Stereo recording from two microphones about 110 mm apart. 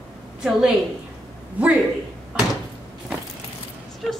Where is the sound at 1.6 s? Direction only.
15° right (ahead or behind).